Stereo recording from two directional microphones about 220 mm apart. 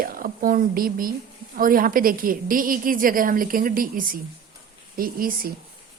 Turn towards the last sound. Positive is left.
turn(degrees=-40)  # may be behind; listen again after turning